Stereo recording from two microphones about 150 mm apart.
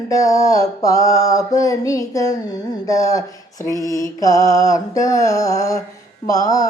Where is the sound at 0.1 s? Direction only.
20° left (ahead or behind).